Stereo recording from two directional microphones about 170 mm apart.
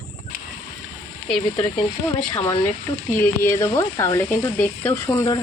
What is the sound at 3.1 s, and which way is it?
Frying, 15° left (ahead or behind).